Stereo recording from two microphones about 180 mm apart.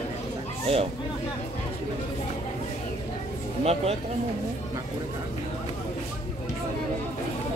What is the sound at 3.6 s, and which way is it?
Speech, 35° right (ahead or behind).